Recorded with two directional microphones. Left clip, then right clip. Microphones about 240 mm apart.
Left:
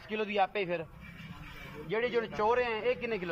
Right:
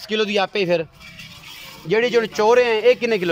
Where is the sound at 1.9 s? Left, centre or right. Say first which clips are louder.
Right 14 dB; right.